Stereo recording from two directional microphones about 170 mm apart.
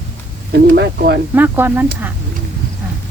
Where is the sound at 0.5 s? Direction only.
75° right (ahead or behind).